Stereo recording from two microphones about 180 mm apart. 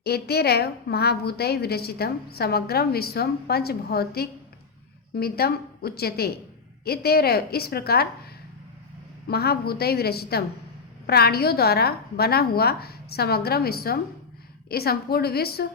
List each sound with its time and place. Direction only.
0.0 s a woman's voice: 60° left (ahead or behind)
9.2 s a woman's voice: 60° left (ahead or behind)